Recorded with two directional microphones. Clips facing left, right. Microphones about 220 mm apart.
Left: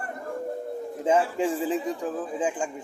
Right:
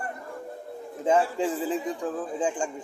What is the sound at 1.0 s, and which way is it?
A man's voice, 10° left (ahead or behind).